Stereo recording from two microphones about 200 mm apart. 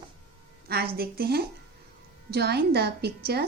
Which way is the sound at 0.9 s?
50° right (ahead or behind).